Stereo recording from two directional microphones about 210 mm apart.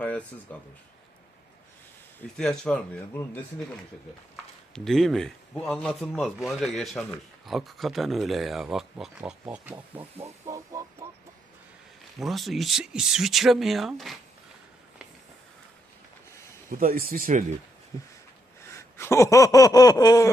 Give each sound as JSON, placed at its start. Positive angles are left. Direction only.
{"t": 0.0, "sound": "a sound", "side_deg": 5}
{"t": 0.5, "sound": "speech", "side_deg": 5}
{"t": 2.4, "sound": "speech", "side_deg": 0}
{"t": 4.7, "sound": "speech", "side_deg": 0}
{"t": 10.2, "sound": "music", "side_deg": -15}
{"t": 12.2, "sound": "speech", "side_deg": 0}
{"t": 16.6, "sound": "speech", "side_deg": -45}
{"t": 18.6, "sound": "a sound", "side_deg": 15}